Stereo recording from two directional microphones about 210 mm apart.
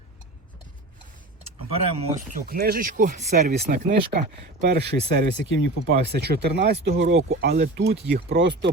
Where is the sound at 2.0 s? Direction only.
35° right (ahead or behind).